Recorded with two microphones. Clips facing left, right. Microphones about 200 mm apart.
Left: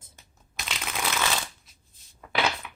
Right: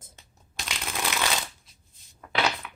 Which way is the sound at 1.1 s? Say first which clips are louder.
Even; 15° right (ahead or behind).